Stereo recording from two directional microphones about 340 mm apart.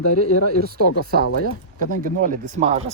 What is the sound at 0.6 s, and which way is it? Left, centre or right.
Speech, right.